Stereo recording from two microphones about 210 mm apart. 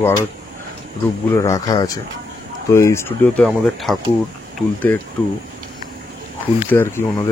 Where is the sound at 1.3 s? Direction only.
15° left (ahead or behind).